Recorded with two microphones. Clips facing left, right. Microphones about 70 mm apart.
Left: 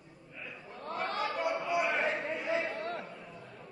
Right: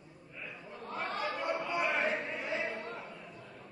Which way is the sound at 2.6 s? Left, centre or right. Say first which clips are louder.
Left 2 dB; left.